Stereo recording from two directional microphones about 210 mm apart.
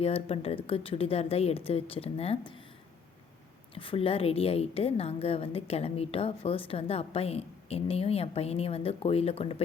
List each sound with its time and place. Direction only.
0.0 s a woman's voice: 30° left (ahead or behind)
3.8 s a woman's voice: 25° left (ahead or behind)